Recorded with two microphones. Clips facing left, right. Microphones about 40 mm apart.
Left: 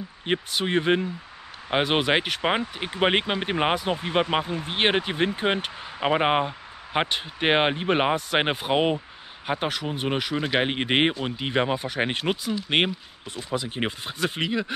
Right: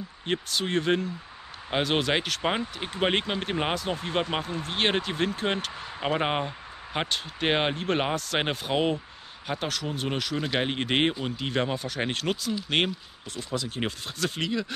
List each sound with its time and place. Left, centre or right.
0.2 s speech: left